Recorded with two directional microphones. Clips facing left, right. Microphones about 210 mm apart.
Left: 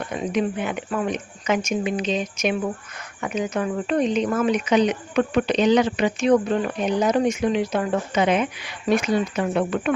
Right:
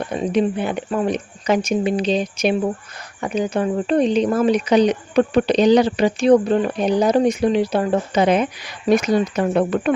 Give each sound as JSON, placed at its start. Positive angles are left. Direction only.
{"t": 0.1, "sound": "speech", "side_deg": -30}